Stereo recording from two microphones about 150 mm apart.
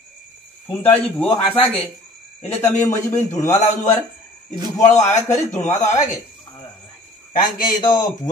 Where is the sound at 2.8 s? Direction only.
20° left (ahead or behind).